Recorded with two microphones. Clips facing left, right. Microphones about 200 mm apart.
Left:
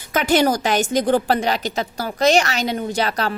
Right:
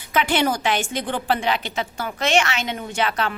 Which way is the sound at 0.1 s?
40° left (ahead or behind).